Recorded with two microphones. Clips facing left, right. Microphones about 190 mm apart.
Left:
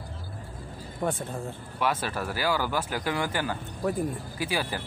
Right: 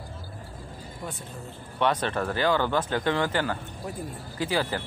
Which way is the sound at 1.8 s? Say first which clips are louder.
Right 3 dB; 5° left (ahead or behind).